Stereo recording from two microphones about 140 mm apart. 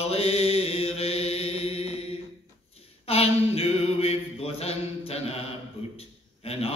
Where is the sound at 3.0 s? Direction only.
45° left (ahead or behind).